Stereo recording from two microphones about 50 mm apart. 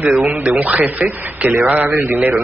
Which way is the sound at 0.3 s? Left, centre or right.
Right.